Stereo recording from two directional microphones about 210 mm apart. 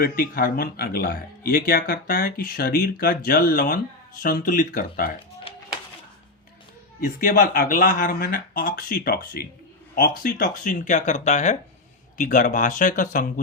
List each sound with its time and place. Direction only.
0.0 s speech: 45° left (ahead or behind)
7.0 s speech: 40° left (ahead or behind)